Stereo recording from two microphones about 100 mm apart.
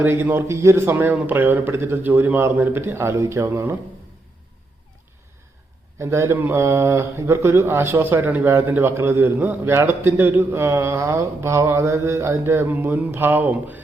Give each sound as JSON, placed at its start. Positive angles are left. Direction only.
{"t": 0.0, "sound": "speech", "side_deg": -20}
{"t": 6.0, "sound": "speech", "side_deg": -30}